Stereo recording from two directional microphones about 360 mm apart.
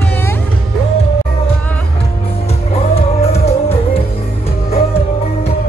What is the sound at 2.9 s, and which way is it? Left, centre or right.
Music, centre.